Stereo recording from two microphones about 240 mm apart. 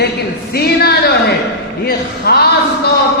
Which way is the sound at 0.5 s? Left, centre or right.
Left.